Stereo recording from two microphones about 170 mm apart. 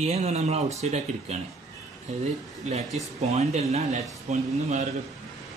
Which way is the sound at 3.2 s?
40° right (ahead or behind).